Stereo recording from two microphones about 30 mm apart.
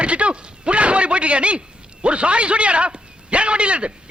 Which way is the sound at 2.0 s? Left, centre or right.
Right.